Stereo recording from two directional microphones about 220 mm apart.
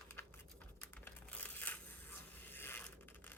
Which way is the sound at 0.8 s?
10° left (ahead or behind).